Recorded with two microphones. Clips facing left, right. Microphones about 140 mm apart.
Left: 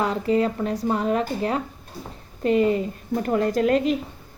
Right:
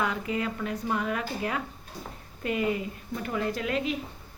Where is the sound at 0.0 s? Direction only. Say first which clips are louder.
Left 8 dB; 35° left (ahead or behind).